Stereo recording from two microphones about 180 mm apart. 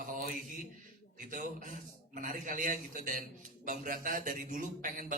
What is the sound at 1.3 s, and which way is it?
A man's voice, 45° right (ahead or behind).